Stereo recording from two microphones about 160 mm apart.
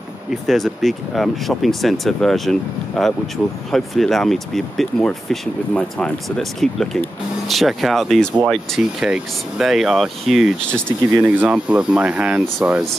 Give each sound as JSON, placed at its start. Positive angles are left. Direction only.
{"t": 0.3, "sound": "speech", "side_deg": 0}